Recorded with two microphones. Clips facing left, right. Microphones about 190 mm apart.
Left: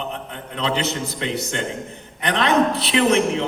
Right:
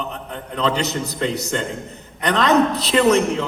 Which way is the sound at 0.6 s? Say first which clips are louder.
Right 2 dB; 45° right (ahead or behind).